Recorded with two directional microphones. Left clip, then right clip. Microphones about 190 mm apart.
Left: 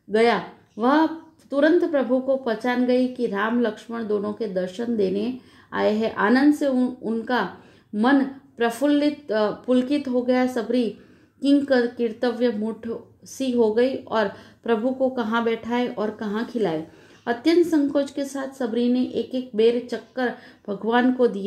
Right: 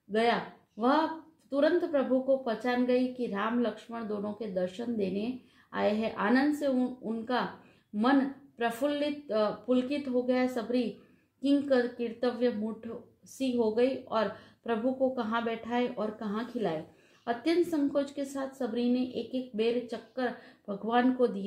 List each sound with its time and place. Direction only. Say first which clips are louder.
0.1 s a woman's voice: left 8 dB; 30° left (ahead or behind)
8.5 s a woman's voice: left 9 dB; 30° left (ahead or behind)